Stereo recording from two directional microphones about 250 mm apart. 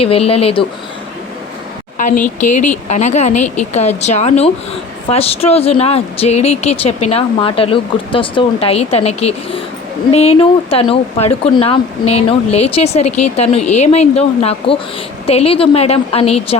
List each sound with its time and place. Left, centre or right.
0.0 s speech: left
2.0 s a sound: left
2.4 s speech: left
13.1 s a woman's voice: left
13.3 s speech: left